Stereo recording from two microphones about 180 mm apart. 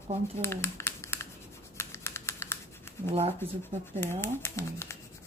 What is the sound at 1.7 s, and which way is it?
Typing, 15° left (ahead or behind).